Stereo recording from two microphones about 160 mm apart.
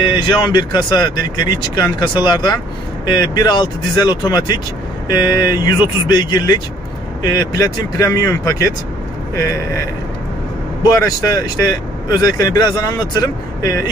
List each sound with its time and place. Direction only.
0.0 s speech: 30° left (ahead or behind)
10.8 s speech: 20° left (ahead or behind)